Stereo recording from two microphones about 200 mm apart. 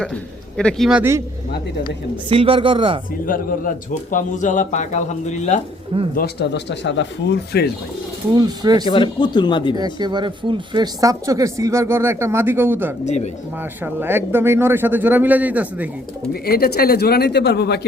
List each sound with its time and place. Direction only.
0.0 s a man's voice: 5° left (ahead or behind)
2.3 s speech: 25° right (ahead or behind)
3.2 s speech: 45° left (ahead or behind)
6.1 s speech: 55° left (ahead or behind)
8.4 s speech: 20° right (ahead or behind)
8.9 s speech: 20° left (ahead or behind)
9.7 s speech: 20° right (ahead or behind)
13.1 s speech: 35° left (ahead or behind)
13.8 s speech: 10° right (ahead or behind)
16.3 s speech: 50° left (ahead or behind)